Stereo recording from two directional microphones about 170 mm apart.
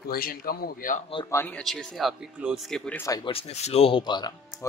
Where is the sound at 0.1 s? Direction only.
60° left (ahead or behind).